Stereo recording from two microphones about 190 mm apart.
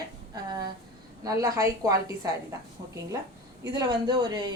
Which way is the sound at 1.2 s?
20° right (ahead or behind).